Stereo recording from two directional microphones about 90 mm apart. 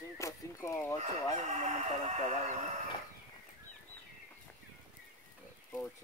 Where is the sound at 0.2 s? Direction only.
35° left (ahead or behind).